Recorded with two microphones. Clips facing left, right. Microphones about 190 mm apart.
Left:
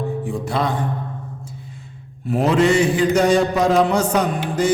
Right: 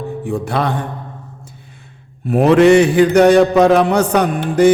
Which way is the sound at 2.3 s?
65° right (ahead or behind).